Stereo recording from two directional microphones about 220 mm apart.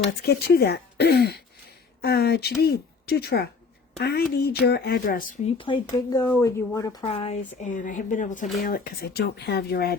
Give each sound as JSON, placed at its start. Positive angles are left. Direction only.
{"t": 0.2, "sound": "speech", "side_deg": 45}
{"t": 5.5, "sound": "speech", "side_deg": 20}
{"t": 7.0, "sound": "speech", "side_deg": 25}